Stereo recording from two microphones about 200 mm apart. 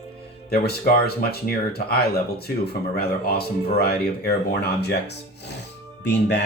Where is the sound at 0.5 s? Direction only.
50° left (ahead or behind).